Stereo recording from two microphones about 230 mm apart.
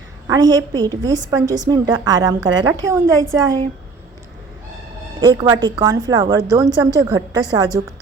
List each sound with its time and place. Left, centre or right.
0.3 s a woman's voice: centre
5.2 s a woman's voice: centre